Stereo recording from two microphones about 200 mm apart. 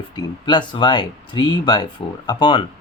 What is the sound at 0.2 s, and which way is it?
Speech, 20° left (ahead or behind).